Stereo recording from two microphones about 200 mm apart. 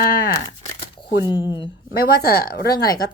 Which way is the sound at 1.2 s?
15° right (ahead or behind).